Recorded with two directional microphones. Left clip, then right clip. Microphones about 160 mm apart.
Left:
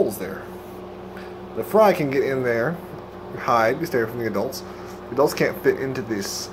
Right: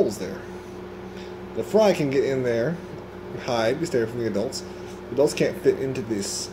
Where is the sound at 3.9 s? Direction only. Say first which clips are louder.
Left 1 dB; 10° right (ahead or behind).